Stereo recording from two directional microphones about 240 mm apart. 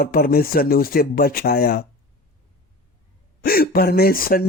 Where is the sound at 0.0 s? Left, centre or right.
Left.